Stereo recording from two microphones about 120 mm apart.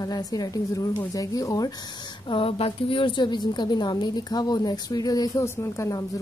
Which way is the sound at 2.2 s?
50° left (ahead or behind).